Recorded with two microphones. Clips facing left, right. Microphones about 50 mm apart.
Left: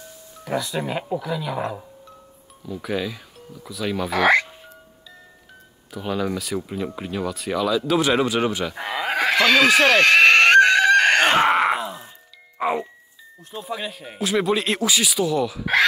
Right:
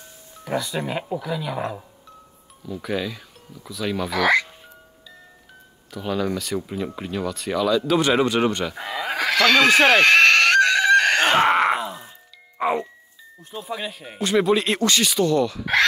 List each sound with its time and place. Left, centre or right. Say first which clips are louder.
0.5 s speech: even; centre
4.1 s speech: left 2 dB; left
5.9 s speech: even; centre
8.7 s sheep: left 2 dB; left
9.4 s speech: right 1 dB; centre
10.4 s chicken: left 3 dB; left
11.3 s groan: even; centre
12.5 s music: right 1 dB; centre
13.4 s speech: even; centre